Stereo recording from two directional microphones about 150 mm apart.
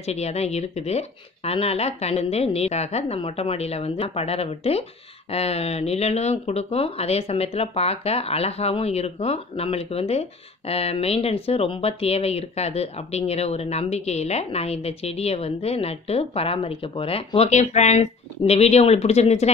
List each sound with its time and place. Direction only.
0.0 s speech: 45° left (ahead or behind)